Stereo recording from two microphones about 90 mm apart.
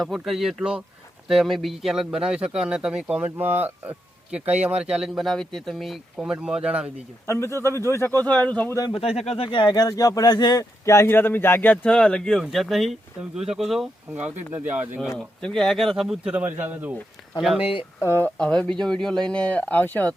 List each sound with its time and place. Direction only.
0.0 s speech: centre (ahead or behind)
7.3 s speech: 30° left (ahead or behind)
9.3 s speech: 80° left
9.7 s speech: 45° left (ahead or behind)
10.8 s speech: 30° left (ahead or behind)
11.9 s speech: 5° left (ahead or behind); by 14.8 s 20° right (ahead or behind)
15.2 s speech: 5° left (ahead or behind); by 16.9 s 20° right (ahead or behind)
17.6 s speech: 90° left
18.0 s speech: 25° left (ahead or behind)
18.3 s speech: 10° left (ahead or behind)